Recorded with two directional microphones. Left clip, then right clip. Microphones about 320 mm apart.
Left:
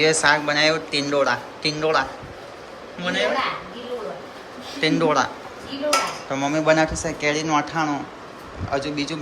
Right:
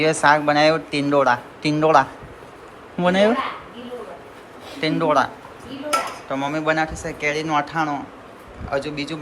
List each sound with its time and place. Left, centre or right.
0.0 s speech: centre
4.8 s speech: centre
6.3 s speech: centre